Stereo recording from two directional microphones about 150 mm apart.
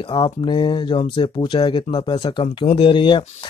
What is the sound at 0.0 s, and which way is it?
Speech, 35° left (ahead or behind).